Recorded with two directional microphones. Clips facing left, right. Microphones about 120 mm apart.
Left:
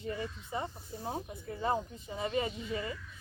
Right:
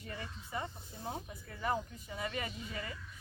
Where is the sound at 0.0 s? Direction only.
25° left (ahead or behind).